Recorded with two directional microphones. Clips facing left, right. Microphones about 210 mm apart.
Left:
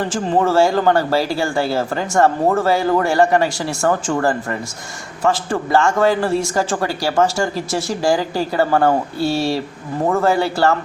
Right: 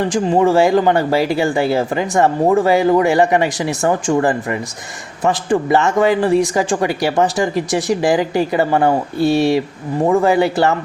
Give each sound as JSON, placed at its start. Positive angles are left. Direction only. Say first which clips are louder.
{"t": 0.1, "sound": "speech", "louder": "right 3 dB", "side_deg": -15}